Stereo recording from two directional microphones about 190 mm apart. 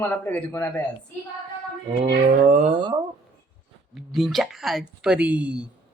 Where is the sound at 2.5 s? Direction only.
35° right (ahead or behind).